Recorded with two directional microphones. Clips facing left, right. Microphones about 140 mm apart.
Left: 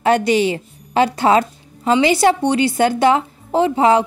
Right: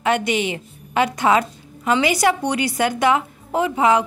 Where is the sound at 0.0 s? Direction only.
35° left (ahead or behind).